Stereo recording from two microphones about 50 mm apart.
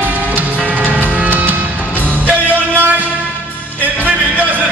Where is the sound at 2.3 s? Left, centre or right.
Right.